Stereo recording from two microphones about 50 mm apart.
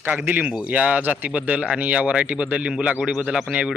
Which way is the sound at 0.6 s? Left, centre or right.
Right.